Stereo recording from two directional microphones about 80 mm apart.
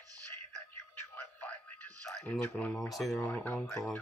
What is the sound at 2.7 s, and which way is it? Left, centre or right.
Speech, centre.